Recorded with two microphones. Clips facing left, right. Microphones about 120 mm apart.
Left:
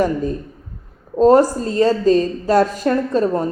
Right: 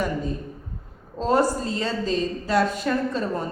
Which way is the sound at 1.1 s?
40° left (ahead or behind).